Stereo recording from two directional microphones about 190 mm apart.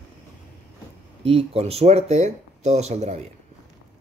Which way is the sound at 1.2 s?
30° right (ahead or behind).